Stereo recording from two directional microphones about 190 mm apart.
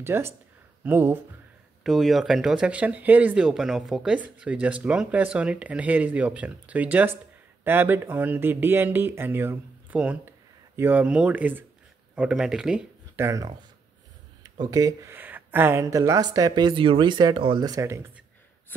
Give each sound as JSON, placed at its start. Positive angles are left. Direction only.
{"t": 0.0, "sound": "speech", "side_deg": -10}
{"t": 1.8, "sound": "speech", "side_deg": 0}